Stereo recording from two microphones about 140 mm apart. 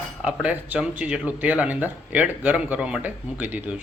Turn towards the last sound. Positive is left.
turn(degrees=-10)  # may be behind; listen again after turning